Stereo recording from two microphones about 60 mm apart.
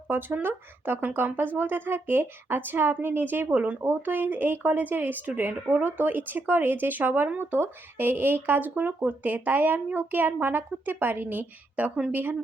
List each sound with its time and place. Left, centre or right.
0.1 s speech: right